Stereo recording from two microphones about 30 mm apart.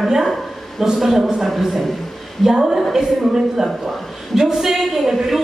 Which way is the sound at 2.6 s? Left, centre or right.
Centre.